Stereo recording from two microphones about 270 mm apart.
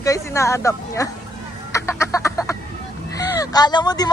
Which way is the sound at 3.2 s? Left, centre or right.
Centre.